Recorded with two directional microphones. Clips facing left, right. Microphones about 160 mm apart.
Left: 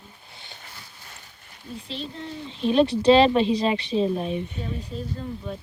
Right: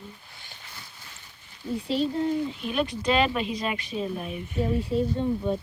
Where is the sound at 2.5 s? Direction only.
25° left (ahead or behind).